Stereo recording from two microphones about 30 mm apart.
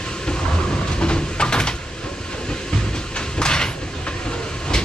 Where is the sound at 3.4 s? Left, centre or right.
Left.